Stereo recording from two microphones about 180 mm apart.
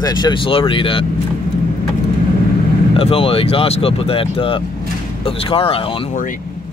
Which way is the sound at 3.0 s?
30° left (ahead or behind).